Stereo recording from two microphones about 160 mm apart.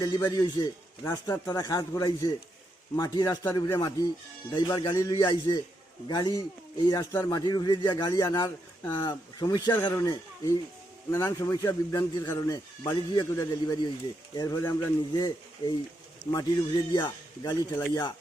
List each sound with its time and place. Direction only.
0.3 s a man's voice: 25° left (ahead or behind)